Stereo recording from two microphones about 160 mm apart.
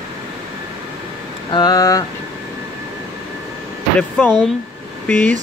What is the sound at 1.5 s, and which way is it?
Speech, 25° left (ahead or behind).